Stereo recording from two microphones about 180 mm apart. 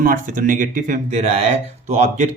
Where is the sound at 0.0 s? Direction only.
45° right (ahead or behind).